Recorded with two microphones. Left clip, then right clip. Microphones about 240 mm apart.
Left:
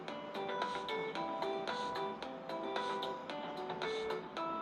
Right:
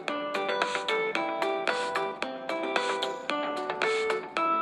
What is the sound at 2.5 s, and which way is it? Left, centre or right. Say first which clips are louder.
Music: right 10 dB; right.